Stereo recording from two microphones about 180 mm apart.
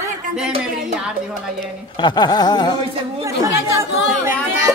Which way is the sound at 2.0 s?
25° left (ahead or behind).